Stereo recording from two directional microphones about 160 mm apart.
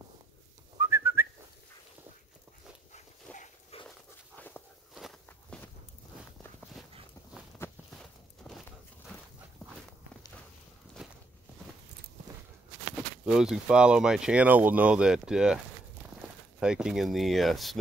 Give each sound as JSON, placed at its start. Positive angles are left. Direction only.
{"t": 0.7, "sound": "whistling", "side_deg": -15}
{"t": 3.3, "sound": "dog", "side_deg": 10}
{"t": 3.7, "sound": "dog", "side_deg": 40}
{"t": 4.4, "sound": "walk", "side_deg": 10}
{"t": 4.9, "sound": "walk", "side_deg": 0}
{"t": 6.8, "sound": "a sound", "side_deg": 0}
{"t": 7.6, "sound": "walk", "side_deg": 15}
{"t": 8.0, "sound": "a sound", "side_deg": 0}
{"t": 11.0, "sound": "walk", "side_deg": -5}
{"t": 13.2, "sound": "speech", "side_deg": -5}